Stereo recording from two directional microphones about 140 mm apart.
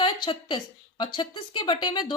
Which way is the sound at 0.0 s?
35° left (ahead or behind).